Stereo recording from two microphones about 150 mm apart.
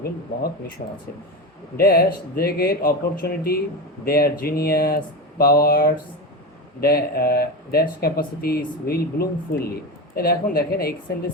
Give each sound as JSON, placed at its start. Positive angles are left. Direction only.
{"t": 0.8, "sound": "speech", "side_deg": 50}
{"t": 1.7, "sound": "speech", "side_deg": 90}